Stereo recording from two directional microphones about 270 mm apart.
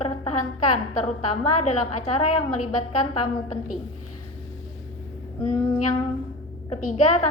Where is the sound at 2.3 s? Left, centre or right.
Left.